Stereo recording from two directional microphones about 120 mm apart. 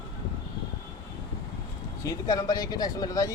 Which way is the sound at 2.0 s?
30° left (ahead or behind).